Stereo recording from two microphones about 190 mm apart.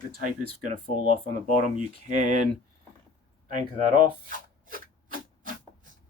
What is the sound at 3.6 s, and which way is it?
Zipper, 45° right (ahead or behind).